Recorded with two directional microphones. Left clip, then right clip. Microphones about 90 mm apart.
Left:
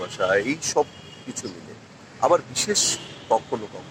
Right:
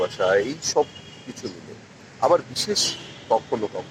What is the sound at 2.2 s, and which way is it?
Speech, 30° right (ahead or behind).